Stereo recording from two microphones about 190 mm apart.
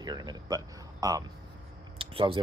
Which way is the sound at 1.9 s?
30° right (ahead or behind).